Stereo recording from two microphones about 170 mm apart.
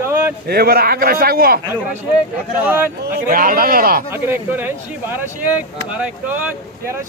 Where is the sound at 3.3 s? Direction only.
55° right (ahead or behind).